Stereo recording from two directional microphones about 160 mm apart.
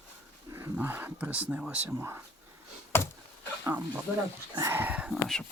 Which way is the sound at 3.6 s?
15° right (ahead or behind).